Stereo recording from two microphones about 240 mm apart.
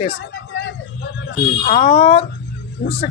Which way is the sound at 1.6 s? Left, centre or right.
Left.